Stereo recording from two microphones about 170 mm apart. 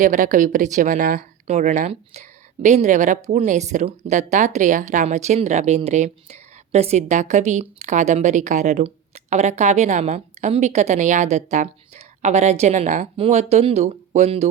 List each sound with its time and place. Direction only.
0.0 s a woman's voice: 50° right (ahead or behind)